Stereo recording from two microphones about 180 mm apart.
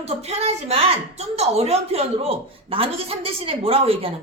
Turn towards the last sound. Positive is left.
turn(degrees=-30)  # may be behind; listen again after turning